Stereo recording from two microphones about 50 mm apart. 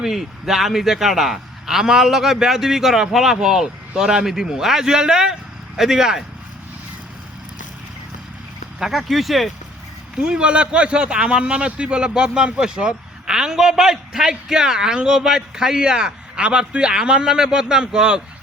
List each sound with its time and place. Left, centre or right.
0.0 s a man's voice: centre
8.8 s speech: centre
10.2 s a man's voice: centre